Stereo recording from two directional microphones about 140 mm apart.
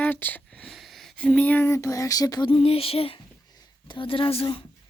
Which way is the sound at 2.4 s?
40° left (ahead or behind).